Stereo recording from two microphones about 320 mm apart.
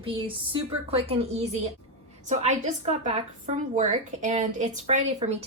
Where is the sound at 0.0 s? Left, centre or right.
Centre.